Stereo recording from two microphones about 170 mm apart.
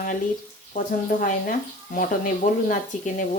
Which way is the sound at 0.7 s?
50° left (ahead or behind).